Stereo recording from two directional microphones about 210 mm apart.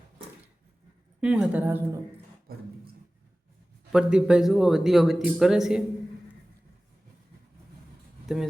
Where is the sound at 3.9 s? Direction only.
5° right (ahead or behind).